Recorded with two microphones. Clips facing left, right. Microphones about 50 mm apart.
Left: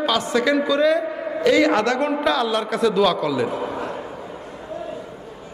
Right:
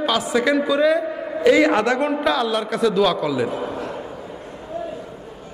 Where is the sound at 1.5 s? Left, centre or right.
Centre.